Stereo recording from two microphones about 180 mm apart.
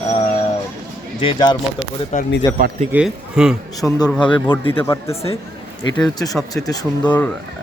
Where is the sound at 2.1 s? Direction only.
40° left (ahead or behind).